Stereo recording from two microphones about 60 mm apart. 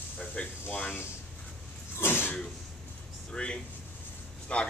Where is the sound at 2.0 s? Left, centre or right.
Left.